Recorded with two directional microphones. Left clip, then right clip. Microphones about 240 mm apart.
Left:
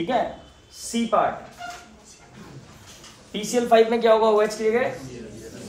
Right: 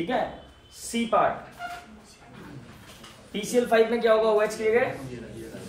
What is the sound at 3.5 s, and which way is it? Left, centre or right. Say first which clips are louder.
Speech: left 4 dB; centre.